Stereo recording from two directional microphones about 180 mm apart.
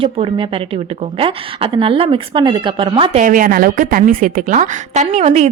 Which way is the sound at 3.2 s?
50° right (ahead or behind).